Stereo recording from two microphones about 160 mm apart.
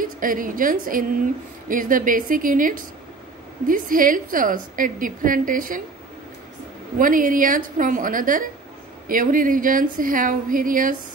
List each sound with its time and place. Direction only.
0.0 s a woman's voice: 60° right (ahead or behind)
7.0 s a woman's voice: 60° right (ahead or behind)